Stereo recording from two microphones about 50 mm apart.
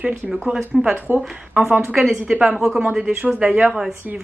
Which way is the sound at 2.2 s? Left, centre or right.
Centre.